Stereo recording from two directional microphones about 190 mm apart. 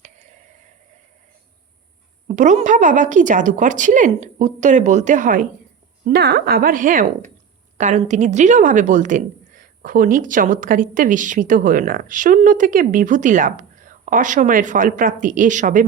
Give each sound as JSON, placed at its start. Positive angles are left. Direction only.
{"t": 2.2, "sound": "a woman's voice", "side_deg": -40}
{"t": 6.1, "sound": "a woman's voice", "side_deg": -60}